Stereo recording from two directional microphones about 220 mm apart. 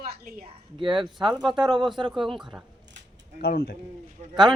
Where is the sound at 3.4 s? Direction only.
45° left (ahead or behind).